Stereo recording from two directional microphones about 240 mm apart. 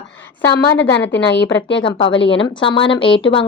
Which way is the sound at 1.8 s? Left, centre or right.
Left.